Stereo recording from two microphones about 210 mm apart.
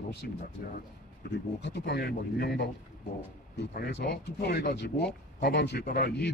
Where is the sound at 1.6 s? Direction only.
50° left (ahead or behind).